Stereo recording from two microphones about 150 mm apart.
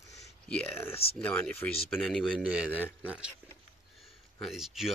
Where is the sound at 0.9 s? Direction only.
40° left (ahead or behind).